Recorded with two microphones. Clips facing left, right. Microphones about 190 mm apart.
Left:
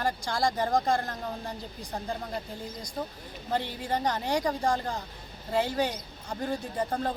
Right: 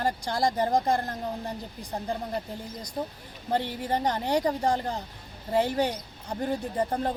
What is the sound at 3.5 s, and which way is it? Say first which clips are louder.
Speech: right 2 dB; 20° right (ahead or behind).